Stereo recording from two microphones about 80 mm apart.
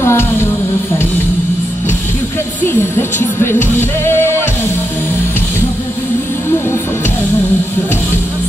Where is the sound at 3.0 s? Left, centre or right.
Left.